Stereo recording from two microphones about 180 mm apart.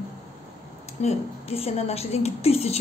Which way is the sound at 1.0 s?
35° left (ahead or behind).